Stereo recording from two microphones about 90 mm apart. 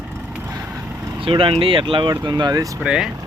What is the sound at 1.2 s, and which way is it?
Speech, 80° right.